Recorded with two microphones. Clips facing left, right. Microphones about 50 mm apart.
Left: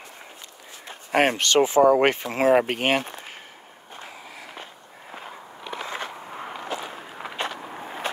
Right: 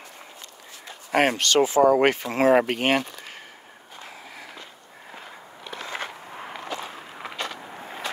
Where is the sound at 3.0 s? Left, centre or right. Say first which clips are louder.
Right 1 dB; left.